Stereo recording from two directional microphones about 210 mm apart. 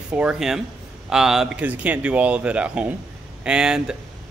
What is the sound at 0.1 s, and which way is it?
A man's voice, 5° right (ahead or behind).